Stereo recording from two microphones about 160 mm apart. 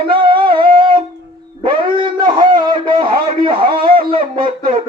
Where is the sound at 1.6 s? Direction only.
30° right (ahead or behind).